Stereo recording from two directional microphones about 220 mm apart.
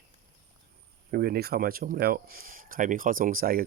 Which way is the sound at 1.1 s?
45° right (ahead or behind).